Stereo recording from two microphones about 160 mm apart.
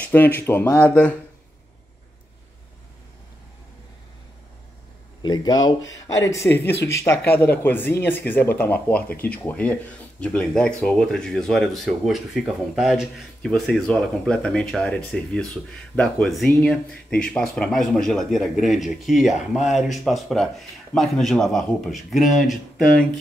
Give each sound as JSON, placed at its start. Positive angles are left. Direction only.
{"t": 0.0, "sound": "speech", "side_deg": 10}
{"t": 5.2, "sound": "speech", "side_deg": 25}